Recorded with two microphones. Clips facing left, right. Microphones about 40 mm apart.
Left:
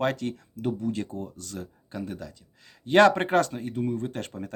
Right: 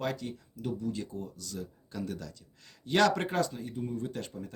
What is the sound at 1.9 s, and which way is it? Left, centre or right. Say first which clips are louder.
Speech: left 3 dB; left.